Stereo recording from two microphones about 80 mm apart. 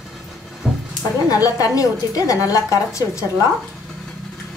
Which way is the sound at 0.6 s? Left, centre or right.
Centre.